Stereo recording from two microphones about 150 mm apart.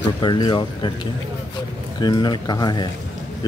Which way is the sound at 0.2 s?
30° left (ahead or behind).